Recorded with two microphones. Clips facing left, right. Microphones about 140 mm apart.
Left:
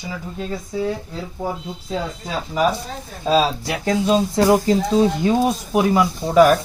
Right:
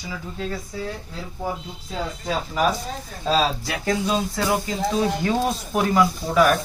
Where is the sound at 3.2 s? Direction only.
5° left (ahead or behind).